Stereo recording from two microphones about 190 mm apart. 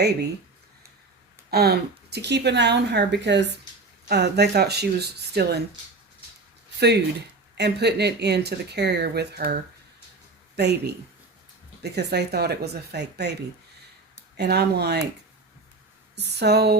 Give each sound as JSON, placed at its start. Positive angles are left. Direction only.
{"t": 1.5, "sound": "speech", "side_deg": -55}
{"t": 6.7, "sound": "speech", "side_deg": -60}
{"t": 14.3, "sound": "speech", "side_deg": -60}
{"t": 16.1, "sound": "speech", "side_deg": -60}